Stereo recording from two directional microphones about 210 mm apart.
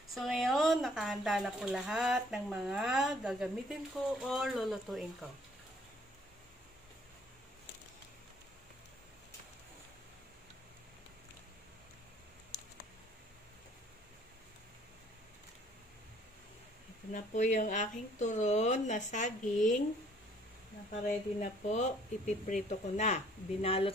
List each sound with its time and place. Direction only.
0.1 s speech: centre (ahead or behind)
17.1 s speech: 35° left (ahead or behind)
20.9 s speech: 35° left (ahead or behind)